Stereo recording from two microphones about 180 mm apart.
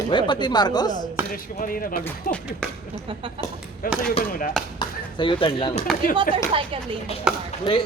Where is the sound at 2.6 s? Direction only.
5° left (ahead or behind).